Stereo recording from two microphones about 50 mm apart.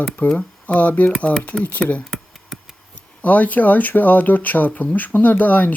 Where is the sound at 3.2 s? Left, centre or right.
Left.